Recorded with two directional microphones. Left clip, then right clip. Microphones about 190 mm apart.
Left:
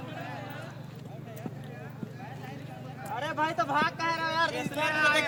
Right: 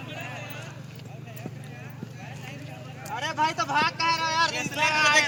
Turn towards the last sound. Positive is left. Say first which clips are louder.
# right 5 dB
turn(degrees=40)  # may be behind; listen again after turning